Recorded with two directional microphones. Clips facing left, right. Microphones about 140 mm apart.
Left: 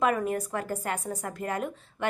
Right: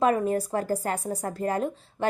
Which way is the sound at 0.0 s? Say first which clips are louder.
Right 3 dB; 30° right (ahead or behind).